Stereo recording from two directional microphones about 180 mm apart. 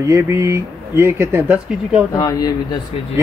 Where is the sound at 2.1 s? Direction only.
20° left (ahead or behind).